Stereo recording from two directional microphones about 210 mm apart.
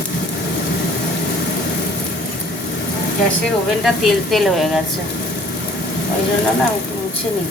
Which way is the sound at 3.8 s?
Centre (ahead or behind).